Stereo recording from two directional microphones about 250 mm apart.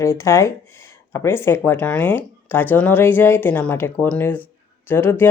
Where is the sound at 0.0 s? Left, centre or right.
Centre.